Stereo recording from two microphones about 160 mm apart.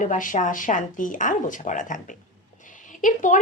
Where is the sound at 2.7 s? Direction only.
55° left (ahead or behind).